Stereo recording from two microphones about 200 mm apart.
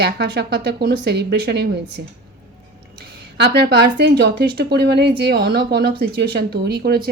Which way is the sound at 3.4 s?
55° right (ahead or behind).